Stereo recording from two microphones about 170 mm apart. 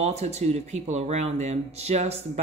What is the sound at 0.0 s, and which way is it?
Speech, 40° right (ahead or behind).